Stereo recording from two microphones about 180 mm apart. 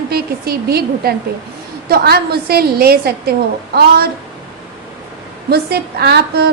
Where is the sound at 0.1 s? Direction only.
60° right (ahead or behind).